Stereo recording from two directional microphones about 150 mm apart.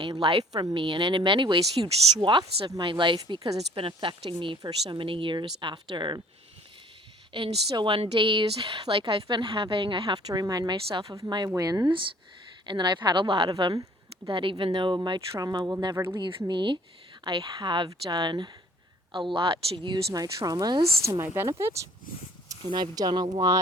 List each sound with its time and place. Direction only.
0.2 s speech: 40° right (ahead or behind)
7.3 s speech: 35° right (ahead or behind)
16.5 s speech: 30° right (ahead or behind)
20.1 s speech: 25° right (ahead or behind)